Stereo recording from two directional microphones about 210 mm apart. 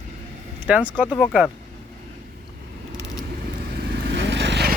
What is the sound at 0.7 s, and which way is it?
Speech, 5° right (ahead or behind).